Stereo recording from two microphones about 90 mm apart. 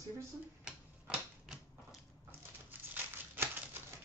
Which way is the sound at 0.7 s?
5° right (ahead or behind).